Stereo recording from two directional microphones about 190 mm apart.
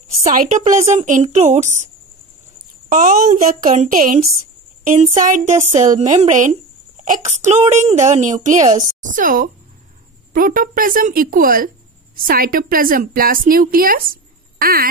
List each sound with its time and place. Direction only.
0.2 s a woman's voice: 45° right (ahead or behind)
2.9 s a woman's voice: 45° right (ahead or behind)